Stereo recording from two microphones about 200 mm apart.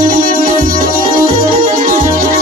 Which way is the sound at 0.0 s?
45° right (ahead or behind).